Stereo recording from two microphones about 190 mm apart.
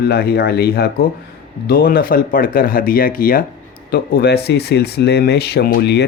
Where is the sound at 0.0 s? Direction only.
55° left (ahead or behind).